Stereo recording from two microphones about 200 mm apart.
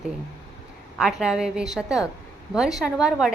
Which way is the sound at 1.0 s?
5° right (ahead or behind).